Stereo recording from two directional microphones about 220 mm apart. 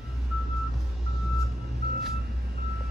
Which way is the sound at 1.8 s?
45° right (ahead or behind).